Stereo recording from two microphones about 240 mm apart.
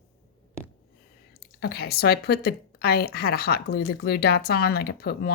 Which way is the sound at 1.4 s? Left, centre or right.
Left.